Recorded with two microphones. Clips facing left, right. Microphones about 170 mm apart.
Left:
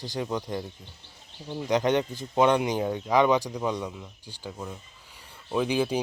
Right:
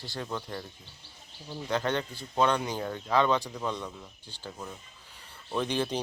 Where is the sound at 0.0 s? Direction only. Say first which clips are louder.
Left 6 dB; 15° left (ahead or behind).